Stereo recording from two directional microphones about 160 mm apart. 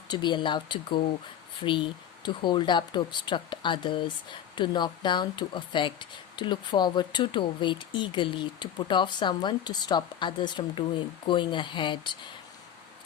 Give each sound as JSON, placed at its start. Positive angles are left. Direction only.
{"t": 0.1, "sound": "speech", "side_deg": 30}
{"t": 2.2, "sound": "speech", "side_deg": 30}